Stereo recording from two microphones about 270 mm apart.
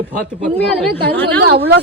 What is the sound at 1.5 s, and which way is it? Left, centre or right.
Speech, right.